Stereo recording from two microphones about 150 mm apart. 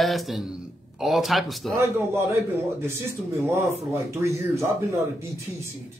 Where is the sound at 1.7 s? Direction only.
20° right (ahead or behind).